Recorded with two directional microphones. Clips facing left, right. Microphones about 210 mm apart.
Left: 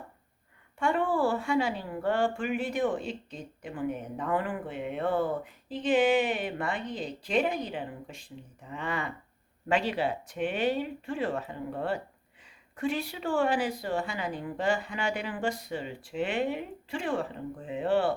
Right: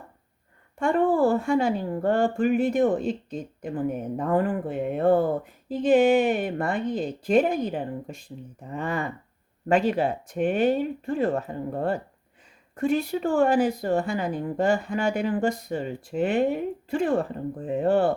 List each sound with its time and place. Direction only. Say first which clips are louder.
0.8 s a woman's voice: right 6 dB; 45° right (ahead or behind)